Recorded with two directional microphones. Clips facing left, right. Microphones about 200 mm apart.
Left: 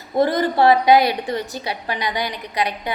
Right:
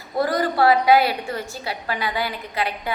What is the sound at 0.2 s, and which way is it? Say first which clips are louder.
A woman's voice: left 3 dB; 25° left (ahead or behind).